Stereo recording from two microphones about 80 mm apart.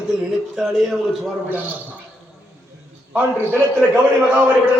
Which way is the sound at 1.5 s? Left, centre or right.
Right.